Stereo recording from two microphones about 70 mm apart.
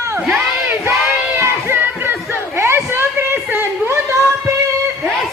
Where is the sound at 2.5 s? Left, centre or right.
Right.